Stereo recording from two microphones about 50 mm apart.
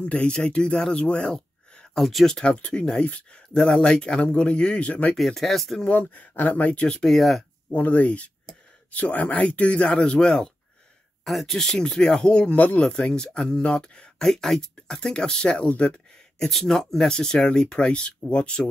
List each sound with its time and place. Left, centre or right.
0.0 s speech: left
2.0 s speech: centre
2.4 s speech: left
5.1 s speech: centre
5.9 s speech: left
7.1 s speech: centre
7.7 s speech: left; by 10.5 s centre
11.2 s speech: centre; by 12.8 s left
12.8 s speech: centre
16.3 s speech: centre